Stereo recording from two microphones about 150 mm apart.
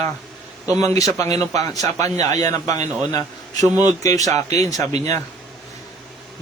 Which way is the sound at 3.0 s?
25° left (ahead or behind).